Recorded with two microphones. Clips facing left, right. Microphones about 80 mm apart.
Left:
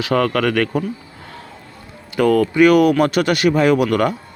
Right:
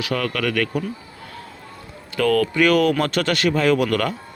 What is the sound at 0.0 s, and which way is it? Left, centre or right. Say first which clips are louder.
Speech: left 6 dB; left.